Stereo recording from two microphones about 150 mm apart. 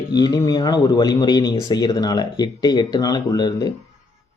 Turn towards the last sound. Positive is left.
turn(degrees=25)  # may be behind; listen again after turning